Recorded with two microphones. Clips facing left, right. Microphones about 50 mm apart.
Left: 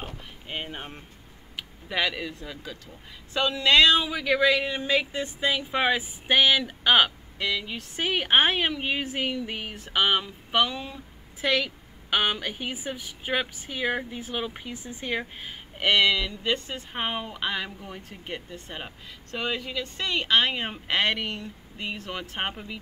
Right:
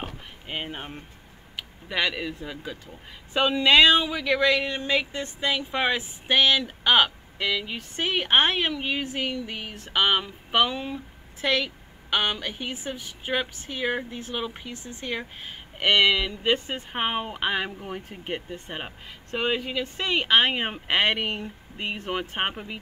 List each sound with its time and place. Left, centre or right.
0.0 s a sound: centre
1.6 s a woman's voice: centre
11.4 s a woman's voice: centre